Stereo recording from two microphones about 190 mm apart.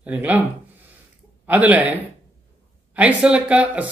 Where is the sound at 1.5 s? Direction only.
10° right (ahead or behind).